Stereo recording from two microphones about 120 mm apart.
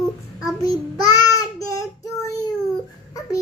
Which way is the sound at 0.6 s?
30° left (ahead or behind).